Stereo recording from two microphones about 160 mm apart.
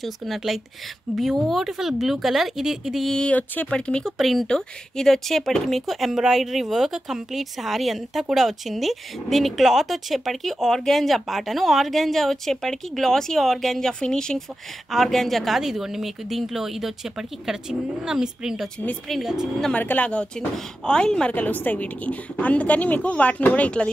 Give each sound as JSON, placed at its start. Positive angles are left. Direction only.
{"t": 0.0, "sound": "speech", "side_deg": 0}